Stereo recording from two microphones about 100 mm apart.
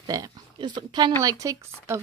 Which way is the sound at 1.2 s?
35° right (ahead or behind).